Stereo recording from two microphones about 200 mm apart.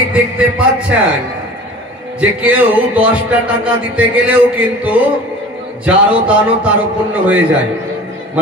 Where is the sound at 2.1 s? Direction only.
5° right (ahead or behind).